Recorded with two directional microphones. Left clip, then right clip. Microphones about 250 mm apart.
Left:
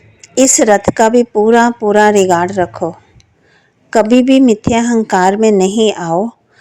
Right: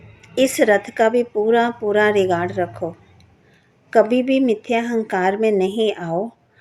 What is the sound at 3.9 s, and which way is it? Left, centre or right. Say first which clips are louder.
A woman's voice: left 6 dB; left.